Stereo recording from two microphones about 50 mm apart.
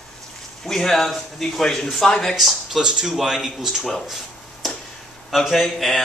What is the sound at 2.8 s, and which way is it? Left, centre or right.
Speech, centre.